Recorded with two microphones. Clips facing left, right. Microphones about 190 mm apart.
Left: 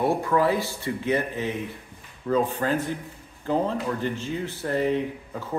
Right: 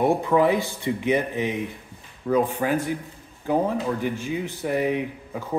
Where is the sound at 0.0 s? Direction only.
20° right (ahead or behind).